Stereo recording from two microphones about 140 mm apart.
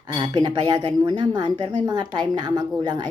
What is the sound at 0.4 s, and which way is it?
Speech, 30° right (ahead or behind).